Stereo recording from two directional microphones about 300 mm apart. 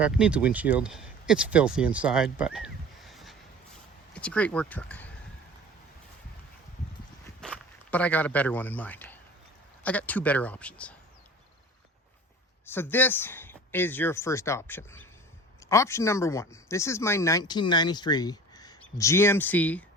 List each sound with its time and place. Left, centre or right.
0.0 s speech: centre
7.4 s speech: centre
12.6 s speech: centre